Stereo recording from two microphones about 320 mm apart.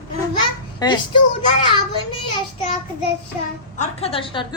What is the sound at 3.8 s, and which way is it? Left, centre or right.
Speech, centre.